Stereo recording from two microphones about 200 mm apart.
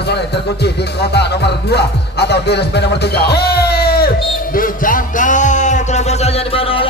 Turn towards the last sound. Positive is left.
turn(degrees=30)  # may be behind; listen again after turning